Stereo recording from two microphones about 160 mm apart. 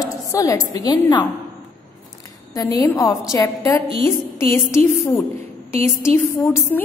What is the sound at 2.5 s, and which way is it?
A woman's voice, 20° left (ahead or behind).